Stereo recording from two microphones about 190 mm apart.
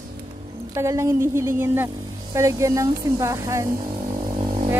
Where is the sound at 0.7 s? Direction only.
15° right (ahead or behind).